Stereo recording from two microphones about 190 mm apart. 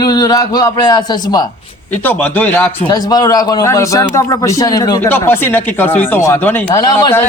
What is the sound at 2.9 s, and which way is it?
Speech, 20° left (ahead or behind).